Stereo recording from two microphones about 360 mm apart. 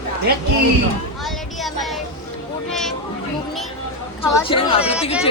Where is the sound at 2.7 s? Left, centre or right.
Centre.